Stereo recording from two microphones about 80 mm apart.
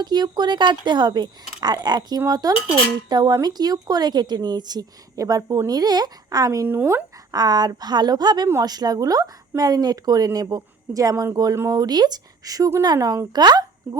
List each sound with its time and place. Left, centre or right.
0.0 s speech: right
6.7 s speech: right
7.3 s speech: right
11.7 s speech: right
13.9 s speech: right